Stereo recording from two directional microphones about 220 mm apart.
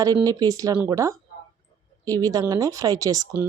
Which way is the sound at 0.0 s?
15° right (ahead or behind).